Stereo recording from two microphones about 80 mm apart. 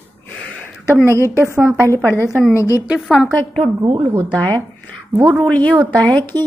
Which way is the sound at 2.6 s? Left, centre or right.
Left.